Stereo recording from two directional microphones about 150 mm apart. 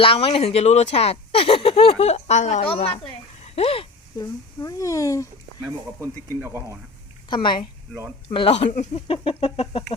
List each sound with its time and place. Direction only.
0.0 s speech: 35° left (ahead or behind)
3.4 s a sound: 40° left (ahead or behind)
4.2 s speech: 20° left (ahead or behind)
6.4 s speech: 15° right (ahead or behind)
7.3 s a woman's voice: 30° left (ahead or behind)